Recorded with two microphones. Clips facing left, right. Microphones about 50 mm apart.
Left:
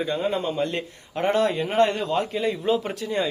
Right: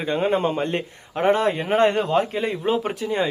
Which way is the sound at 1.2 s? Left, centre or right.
Right.